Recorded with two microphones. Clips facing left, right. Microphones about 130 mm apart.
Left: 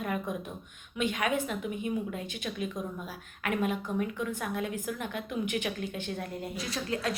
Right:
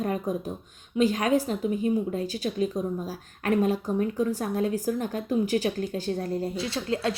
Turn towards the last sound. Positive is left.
turn(degrees=-30)  # may be behind; listen again after turning